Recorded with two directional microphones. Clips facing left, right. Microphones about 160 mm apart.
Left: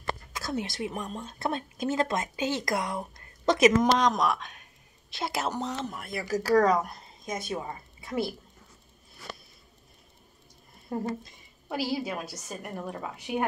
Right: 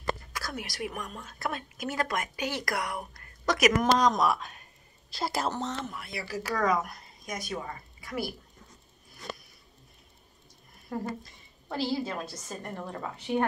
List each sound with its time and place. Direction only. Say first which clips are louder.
0.3 s a woman's voice: left 5 dB; 25° left (ahead or behind)
4.0 s speech: even; 5° right (ahead or behind)
5.5 s a woman's voice: left 1 dB; 10° left (ahead or behind)
5.9 s speech: left 5 dB; 45° left (ahead or behind); by 8.3 s 25° left (ahead or behind)
10.9 s a woman's voice: left 2 dB; 25° left (ahead or behind)
11.7 s a woman's voice: even; 10° left (ahead or behind)